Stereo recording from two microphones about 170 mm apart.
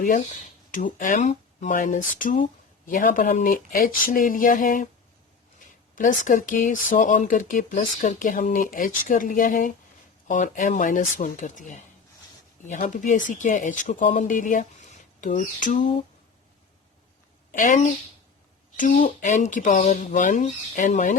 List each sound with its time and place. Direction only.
0.7 s speech: 50° left (ahead or behind)
6.0 s speech: 50° left (ahead or behind)
17.5 s speech: 50° left (ahead or behind)
18.8 s speech: 50° left (ahead or behind)